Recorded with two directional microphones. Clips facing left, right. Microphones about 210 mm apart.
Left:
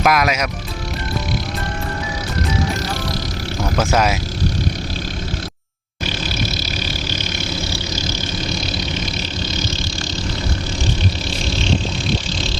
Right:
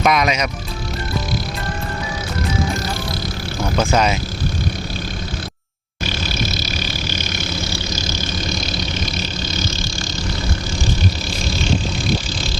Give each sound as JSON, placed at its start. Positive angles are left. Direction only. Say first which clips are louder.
{"t": 0.0, "sound": "speech", "louder": "even", "side_deg": 0}
{"t": 3.6, "sound": "speech", "louder": "even", "side_deg": 5}